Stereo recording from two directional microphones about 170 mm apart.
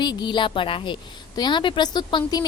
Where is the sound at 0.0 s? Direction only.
25° left (ahead or behind).